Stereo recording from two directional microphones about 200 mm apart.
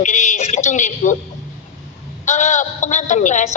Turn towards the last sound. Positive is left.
turn(degrees=35)  # may be behind; listen again after turning